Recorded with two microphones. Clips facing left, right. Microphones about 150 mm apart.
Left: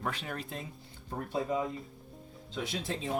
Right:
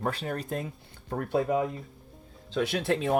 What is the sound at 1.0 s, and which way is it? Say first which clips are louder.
Speech: right 6 dB; 65° right (ahead or behind).